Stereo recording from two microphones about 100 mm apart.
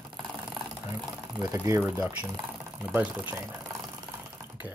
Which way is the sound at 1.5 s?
25° right (ahead or behind).